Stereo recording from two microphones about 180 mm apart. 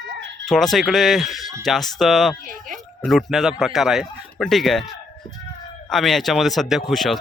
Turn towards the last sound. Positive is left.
turn(degrees=0)  # may be behind; listen again after turning